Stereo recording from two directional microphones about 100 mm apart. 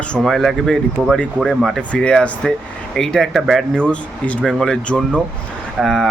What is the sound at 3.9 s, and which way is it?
Speech, 10° left (ahead or behind).